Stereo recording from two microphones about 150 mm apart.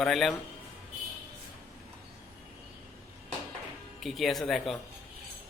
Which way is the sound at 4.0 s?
Centre (ahead or behind).